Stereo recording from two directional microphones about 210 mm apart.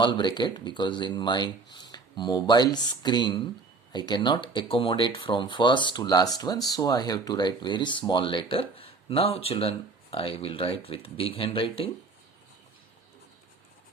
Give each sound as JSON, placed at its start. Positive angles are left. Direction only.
{"t": 0.0, "sound": "speech", "side_deg": 20}